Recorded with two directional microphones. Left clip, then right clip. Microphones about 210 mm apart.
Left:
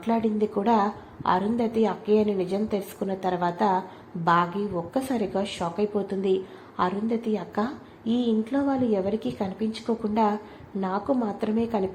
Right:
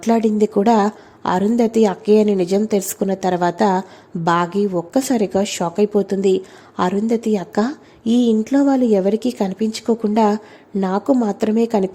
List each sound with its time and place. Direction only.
0.0 s a woman's voice: 50° right (ahead or behind)